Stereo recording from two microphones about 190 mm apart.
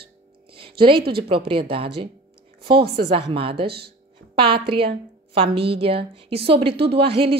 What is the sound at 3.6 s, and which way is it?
Speech, 55° right (ahead or behind).